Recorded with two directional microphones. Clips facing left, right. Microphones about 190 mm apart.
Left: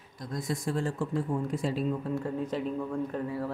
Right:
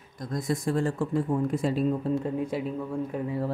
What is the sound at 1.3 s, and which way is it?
Speech, 70° right (ahead or behind).